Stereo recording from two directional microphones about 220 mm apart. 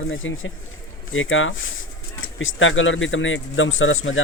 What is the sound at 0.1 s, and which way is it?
Speech, 60° left (ahead or behind).